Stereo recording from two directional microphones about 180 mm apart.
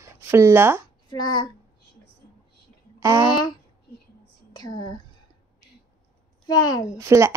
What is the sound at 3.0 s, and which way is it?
Speech, 15° right (ahead or behind).